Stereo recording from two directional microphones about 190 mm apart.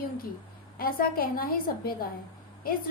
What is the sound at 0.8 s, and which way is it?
Speech, 50° left (ahead or behind).